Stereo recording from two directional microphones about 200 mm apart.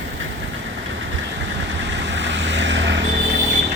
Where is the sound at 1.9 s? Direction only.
60° right (ahead or behind).